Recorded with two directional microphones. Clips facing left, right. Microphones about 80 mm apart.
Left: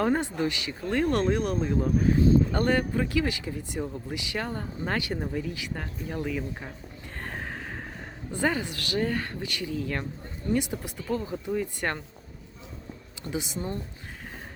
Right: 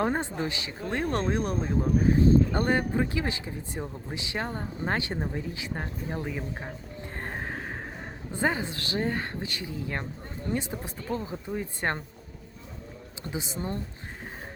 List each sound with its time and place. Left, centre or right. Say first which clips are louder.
0.0 s speech: left 2 dB; right
2.5 s speech: left 1 dB; right
7.2 s music: right 1 dB; right
8.3 s speech: left 1 dB; right
13.3 s speech: left 1 dB; right